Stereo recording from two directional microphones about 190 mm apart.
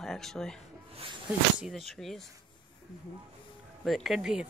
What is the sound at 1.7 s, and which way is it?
Speech, centre (ahead or behind).